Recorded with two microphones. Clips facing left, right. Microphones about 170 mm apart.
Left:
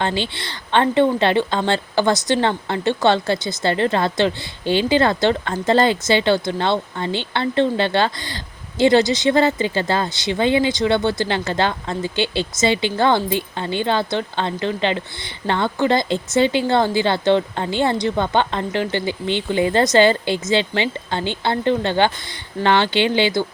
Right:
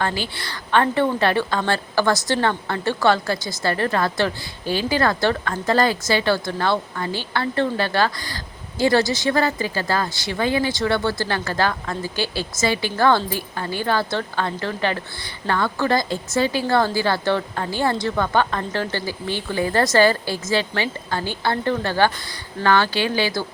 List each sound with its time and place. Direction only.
0.0 s speech: 25° left (ahead or behind)